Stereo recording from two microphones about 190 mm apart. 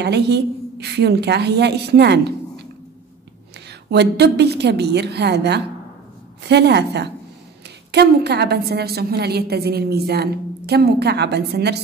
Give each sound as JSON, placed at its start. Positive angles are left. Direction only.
{"t": 0.0, "sound": "a woman's voice", "side_deg": -60}
{"t": 3.9, "sound": "a woman's voice", "side_deg": -60}